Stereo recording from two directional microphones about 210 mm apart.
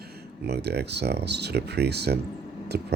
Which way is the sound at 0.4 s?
50° right (ahead or behind).